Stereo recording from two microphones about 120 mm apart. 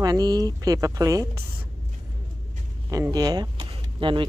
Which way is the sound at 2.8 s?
30° right (ahead or behind).